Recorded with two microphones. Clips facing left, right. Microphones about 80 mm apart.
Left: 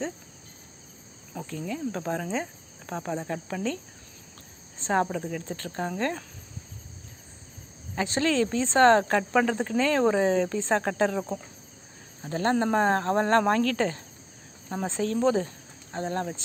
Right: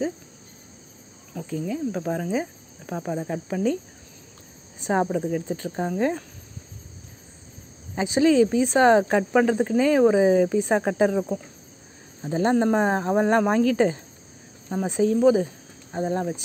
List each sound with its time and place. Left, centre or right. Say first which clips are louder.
1.4 s speech: right 5 dB; centre
7.9 s speech: right 7 dB; centre